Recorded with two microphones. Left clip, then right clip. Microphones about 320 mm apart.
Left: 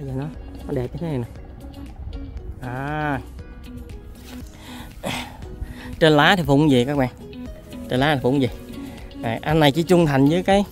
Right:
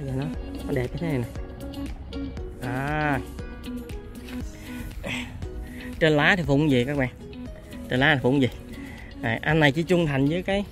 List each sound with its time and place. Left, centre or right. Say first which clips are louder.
0.3 s music: right 4 dB; right
1.0 s livestock: even; centre
2.6 s livestock: left 1 dB; centre
4.7 s throat clearing: left 4 dB; left
5.9 s speech: left 5 dB; centre
7.3 s music: left 3 dB; left
7.9 s speech: left 1 dB; centre